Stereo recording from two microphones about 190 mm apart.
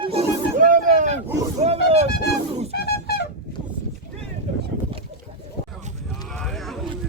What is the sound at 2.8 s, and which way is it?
Music, 55° left (ahead or behind).